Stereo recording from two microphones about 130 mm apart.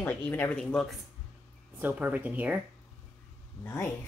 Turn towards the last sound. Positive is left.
turn(degrees=20)  # may be behind; listen again after turning